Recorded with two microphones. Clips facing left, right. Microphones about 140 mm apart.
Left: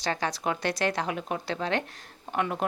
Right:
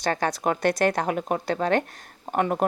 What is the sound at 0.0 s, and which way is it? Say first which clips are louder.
A woman's voice: right 5 dB; 50° right (ahead or behind).